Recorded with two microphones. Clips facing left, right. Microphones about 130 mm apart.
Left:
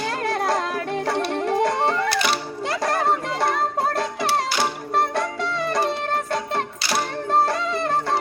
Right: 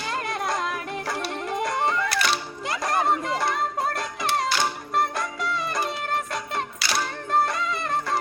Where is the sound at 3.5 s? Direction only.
30° left (ahead or behind).